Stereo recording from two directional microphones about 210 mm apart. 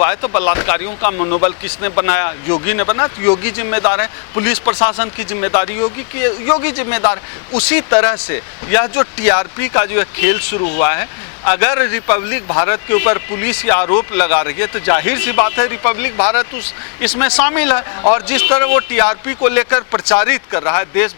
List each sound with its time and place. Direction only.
0.0 s speech: 15° left (ahead or behind)